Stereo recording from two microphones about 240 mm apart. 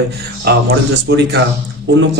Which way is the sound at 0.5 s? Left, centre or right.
Right.